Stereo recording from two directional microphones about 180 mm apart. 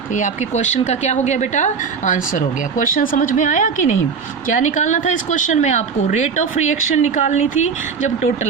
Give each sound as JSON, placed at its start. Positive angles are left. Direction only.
{"t": 0.1, "sound": "a woman's voice", "side_deg": 45}